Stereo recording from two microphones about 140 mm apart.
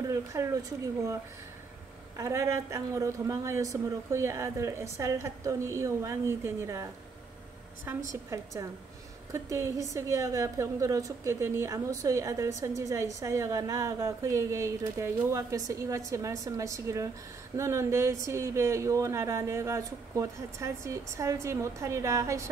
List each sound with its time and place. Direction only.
0.1 s a woman's voice: 20° right (ahead or behind)
2.1 s a woman's voice: 20° right (ahead or behind)
8.1 s a woman's voice: 20° right (ahead or behind)